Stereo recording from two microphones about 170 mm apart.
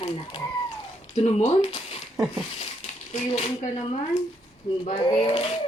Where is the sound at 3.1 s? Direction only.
35° left (ahead or behind).